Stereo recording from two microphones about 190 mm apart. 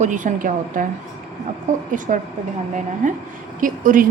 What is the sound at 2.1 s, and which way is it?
A woman's voice, 45° right (ahead or behind).